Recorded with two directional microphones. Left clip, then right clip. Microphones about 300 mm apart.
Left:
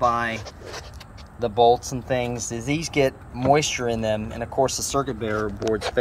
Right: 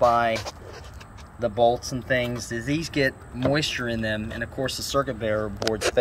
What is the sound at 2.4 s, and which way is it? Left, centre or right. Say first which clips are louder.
Speech: left 1 dB; left.